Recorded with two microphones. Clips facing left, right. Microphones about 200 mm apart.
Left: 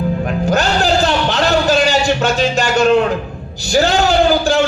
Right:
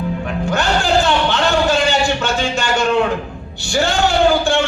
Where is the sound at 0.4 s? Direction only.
40° left (ahead or behind).